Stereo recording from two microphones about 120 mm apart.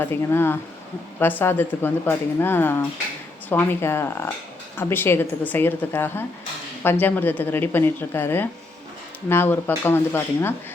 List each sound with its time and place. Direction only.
0.0 s a woman's voice: 20° left (ahead or behind)